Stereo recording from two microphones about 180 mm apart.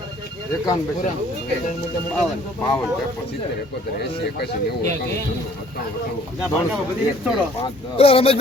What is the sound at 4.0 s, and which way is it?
Speech, 60° left (ahead or behind).